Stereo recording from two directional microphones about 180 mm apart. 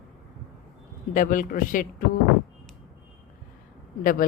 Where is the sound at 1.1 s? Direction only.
45° left (ahead or behind).